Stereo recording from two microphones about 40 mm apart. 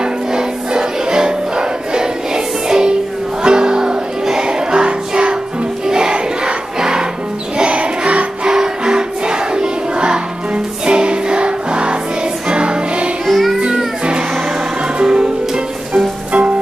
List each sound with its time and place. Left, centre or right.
0.0 s music: centre
8.5 s music: centre
13.3 s music: centre
15.0 s music: right